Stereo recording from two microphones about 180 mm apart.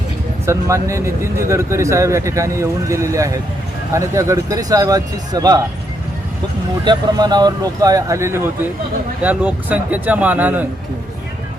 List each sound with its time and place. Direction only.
0.4 s speech: 15° right (ahead or behind)
6.8 s speech: 25° right (ahead or behind)